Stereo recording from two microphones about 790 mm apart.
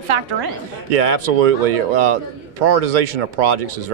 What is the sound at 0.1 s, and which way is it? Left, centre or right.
Speech, right.